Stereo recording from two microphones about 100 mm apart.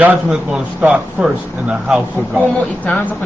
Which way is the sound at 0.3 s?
10° right (ahead or behind).